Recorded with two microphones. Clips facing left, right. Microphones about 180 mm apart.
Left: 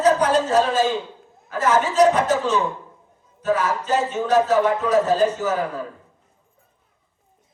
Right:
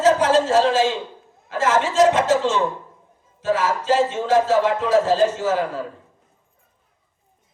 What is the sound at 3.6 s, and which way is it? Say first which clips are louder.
Speech: right 2 dB; 90° right.